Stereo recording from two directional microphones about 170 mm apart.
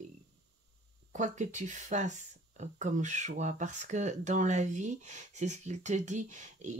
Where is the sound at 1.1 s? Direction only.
45° right (ahead or behind).